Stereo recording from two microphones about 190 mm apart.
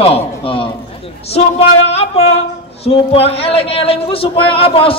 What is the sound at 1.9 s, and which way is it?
A man's voice, 35° left (ahead or behind).